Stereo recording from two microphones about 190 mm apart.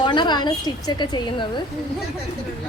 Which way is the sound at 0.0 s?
25° left (ahead or behind).